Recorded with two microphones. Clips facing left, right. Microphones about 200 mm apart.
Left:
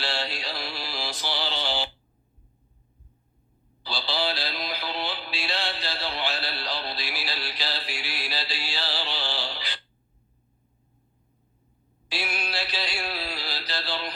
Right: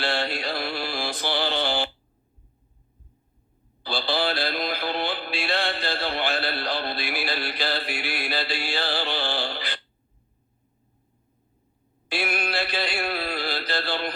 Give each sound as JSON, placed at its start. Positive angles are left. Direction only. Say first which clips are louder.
{"t": 0.0, "sound": "music", "louder": "right 5 dB", "side_deg": -55}
{"t": 3.8, "sound": "synthetic singing", "louder": "right 4 dB", "side_deg": -55}
{"t": 12.0, "sound": "a sound", "louder": "right 5 dB", "side_deg": -55}